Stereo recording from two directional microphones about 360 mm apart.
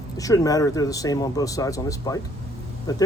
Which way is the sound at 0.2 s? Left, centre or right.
Centre.